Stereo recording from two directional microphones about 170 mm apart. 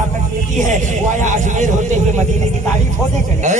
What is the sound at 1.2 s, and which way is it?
Speech, 45° right (ahead or behind).